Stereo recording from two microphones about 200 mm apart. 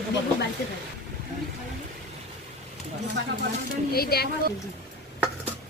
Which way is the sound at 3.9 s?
50° left (ahead or behind).